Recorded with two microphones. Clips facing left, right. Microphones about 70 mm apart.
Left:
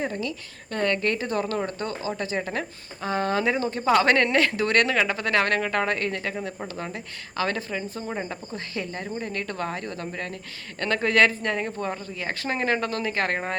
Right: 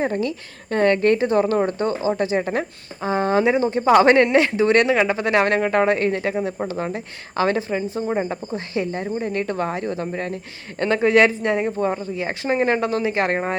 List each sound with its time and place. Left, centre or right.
0.0 s speech: right
9.0 s a woman's voice: centre
9.3 s speech: right